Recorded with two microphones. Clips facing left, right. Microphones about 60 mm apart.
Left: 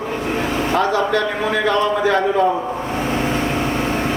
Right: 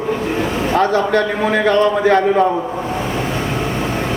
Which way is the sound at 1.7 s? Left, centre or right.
Right.